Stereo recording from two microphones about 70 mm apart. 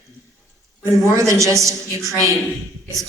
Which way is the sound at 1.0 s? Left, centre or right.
Right.